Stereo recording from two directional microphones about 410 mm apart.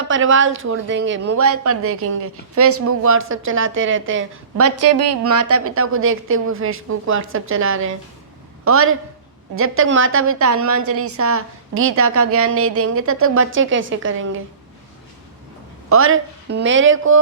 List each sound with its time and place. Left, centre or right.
0.1 s speech: right
15.9 s a woman's voice: right